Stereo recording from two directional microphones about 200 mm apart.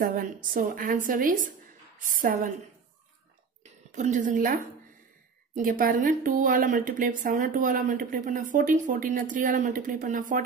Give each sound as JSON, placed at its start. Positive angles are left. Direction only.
{"t": 0.0, "sound": "a woman's voice", "side_deg": -40}
{"t": 3.9, "sound": "a woman's voice", "side_deg": -40}